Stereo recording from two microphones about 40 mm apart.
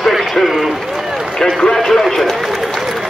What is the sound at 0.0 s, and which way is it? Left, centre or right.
Run, centre.